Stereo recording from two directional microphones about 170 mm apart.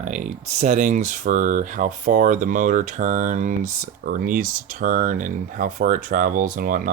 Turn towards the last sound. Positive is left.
turn(degrees=-55)  # may be behind; listen again after turning